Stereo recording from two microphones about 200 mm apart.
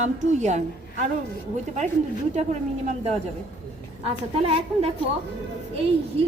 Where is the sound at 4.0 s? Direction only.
30° right (ahead or behind).